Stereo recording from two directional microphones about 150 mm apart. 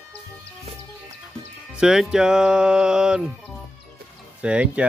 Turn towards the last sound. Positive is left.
turn(degrees=-5)  # may be behind; listen again after turning